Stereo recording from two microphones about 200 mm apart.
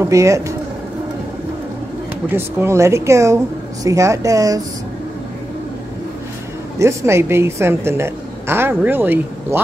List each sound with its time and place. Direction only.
0.0 s a woman's voice: 15° right (ahead or behind)
2.2 s a woman's voice: 10° right (ahead or behind)
6.8 s a woman's voice: 15° right (ahead or behind)